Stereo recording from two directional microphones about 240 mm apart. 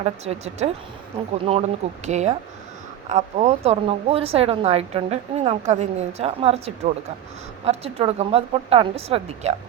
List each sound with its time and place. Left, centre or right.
0.0 s a woman's voice: right